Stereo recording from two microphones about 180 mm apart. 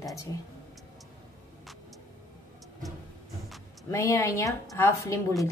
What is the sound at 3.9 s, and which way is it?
A woman's voice, 15° left (ahead or behind).